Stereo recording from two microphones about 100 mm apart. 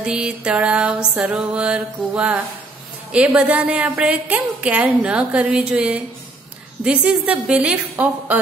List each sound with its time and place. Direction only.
0.0 s a woman's voice: 10° right (ahead or behind)